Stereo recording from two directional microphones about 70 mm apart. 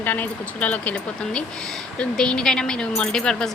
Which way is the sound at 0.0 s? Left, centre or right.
Left.